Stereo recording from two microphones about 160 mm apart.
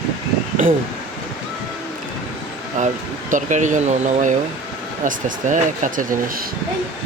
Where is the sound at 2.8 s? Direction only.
50° right (ahead or behind).